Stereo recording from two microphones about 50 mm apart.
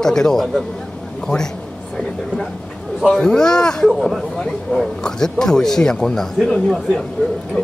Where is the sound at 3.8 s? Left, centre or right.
Centre.